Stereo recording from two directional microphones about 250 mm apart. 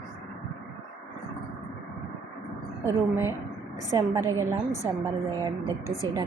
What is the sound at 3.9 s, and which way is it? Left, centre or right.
Speech, centre.